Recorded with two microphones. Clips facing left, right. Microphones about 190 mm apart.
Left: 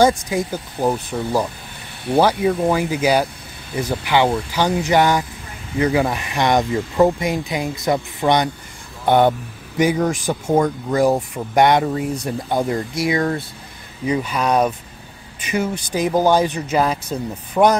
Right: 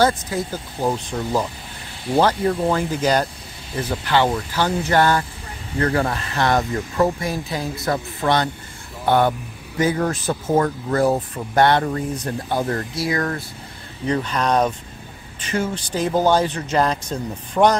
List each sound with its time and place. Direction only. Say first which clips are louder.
0.0 s speech: left 3 dB; 15° left (ahead or behind)
14.0 s speech: left 1 dB; 10° left (ahead or behind)